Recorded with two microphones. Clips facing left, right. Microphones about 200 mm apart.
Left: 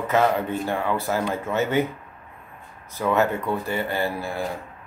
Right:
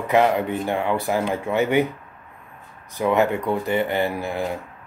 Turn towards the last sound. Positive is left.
turn(degrees=-20)  # may be behind; listen again after turning